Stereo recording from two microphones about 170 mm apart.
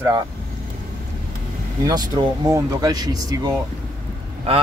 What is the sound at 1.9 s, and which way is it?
Speech, 25° right (ahead or behind).